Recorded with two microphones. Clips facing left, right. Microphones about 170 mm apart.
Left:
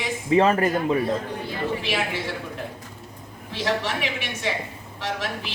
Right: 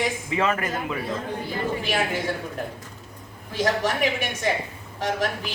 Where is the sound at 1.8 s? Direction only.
45° right (ahead or behind).